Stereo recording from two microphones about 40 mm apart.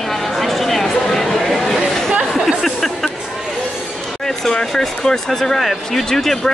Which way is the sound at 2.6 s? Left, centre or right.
Centre.